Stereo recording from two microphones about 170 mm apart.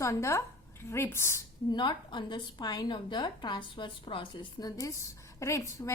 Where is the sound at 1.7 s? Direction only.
25° left (ahead or behind).